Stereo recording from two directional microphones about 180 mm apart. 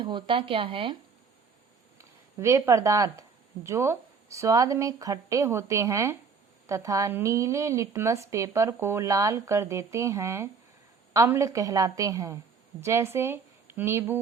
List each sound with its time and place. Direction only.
0.0 s speech: 25° right (ahead or behind)
2.0 s a woman's voice: 15° right (ahead or behind)